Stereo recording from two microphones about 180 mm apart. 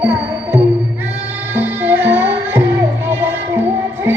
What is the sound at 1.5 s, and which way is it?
Music, 10° right (ahead or behind).